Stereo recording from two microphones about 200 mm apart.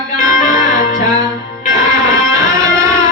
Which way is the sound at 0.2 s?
20° right (ahead or behind).